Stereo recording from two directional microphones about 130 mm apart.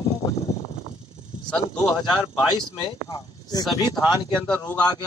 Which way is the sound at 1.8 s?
35° left (ahead or behind).